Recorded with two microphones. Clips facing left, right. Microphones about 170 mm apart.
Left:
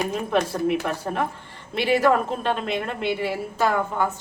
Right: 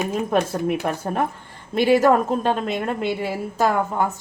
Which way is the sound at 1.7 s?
45° right (ahead or behind).